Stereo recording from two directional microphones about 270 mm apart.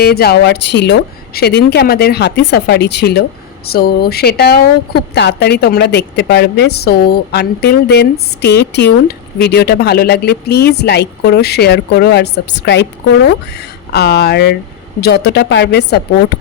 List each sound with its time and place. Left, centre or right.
0.0 s speech: left